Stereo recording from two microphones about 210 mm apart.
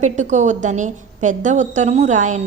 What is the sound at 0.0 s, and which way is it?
A woman's voice, 35° right (ahead or behind).